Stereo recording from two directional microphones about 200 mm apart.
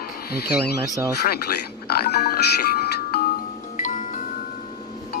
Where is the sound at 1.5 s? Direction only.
55° left (ahead or behind).